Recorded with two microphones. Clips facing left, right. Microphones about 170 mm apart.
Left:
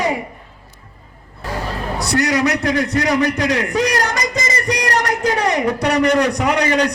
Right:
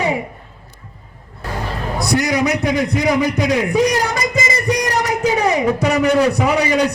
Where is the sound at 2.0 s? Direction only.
10° right (ahead or behind).